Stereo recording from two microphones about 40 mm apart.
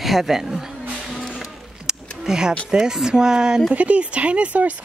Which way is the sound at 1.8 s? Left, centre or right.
Centre.